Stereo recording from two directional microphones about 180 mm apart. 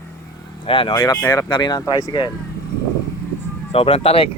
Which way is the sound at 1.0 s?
20° left (ahead or behind).